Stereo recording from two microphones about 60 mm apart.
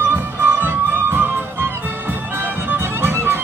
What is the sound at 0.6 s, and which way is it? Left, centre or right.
Music, right.